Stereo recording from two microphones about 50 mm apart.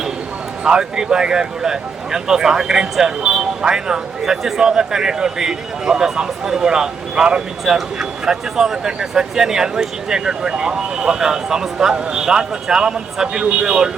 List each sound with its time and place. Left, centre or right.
0.6 s speech: centre